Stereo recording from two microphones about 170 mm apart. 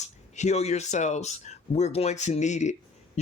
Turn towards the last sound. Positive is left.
turn(degrees=45)  # may be behind; listen again after turning